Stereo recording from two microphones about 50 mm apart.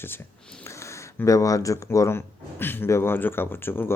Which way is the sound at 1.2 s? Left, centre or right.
Left.